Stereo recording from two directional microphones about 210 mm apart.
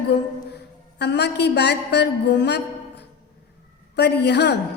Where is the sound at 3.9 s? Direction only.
55° left (ahead or behind).